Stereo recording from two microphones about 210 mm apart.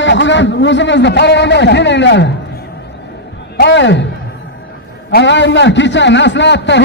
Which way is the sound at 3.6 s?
55° left (ahead or behind).